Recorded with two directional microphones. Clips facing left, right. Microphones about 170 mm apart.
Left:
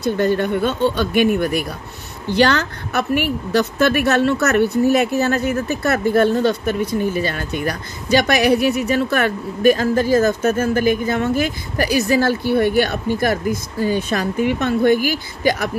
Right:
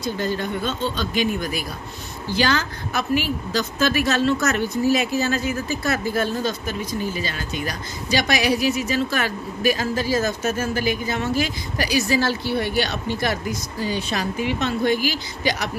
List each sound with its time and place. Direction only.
0.0 s a woman's voice: 60° left (ahead or behind)